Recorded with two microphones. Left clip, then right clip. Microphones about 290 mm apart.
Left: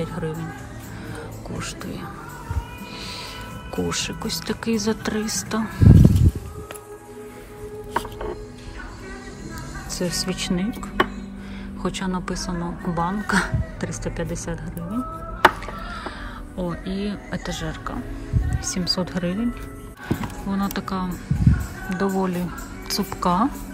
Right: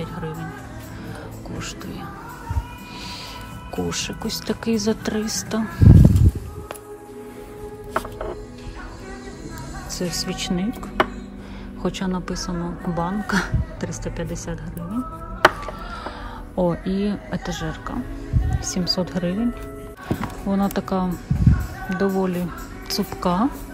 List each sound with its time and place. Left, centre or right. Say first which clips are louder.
0.0 s music: left 3 dB; centre
3.7 s a woman's voice: left 1 dB; centre
9.8 s speech: left 1 dB; centre
11.8 s a woman's voice: right 1 dB; centre
15.6 s a sound: right 1 dB; centre
16.5 s a woman's voice: right 7 dB; centre